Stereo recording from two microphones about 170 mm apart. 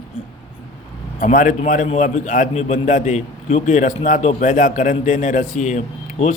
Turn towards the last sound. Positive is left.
turn(degrees=45)  # may be behind; listen again after turning